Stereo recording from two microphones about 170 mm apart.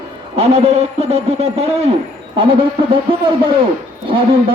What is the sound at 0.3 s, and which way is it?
A man's voice, 40° right (ahead or behind).